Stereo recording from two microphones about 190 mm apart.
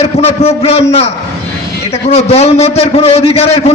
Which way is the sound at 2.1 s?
35° left (ahead or behind).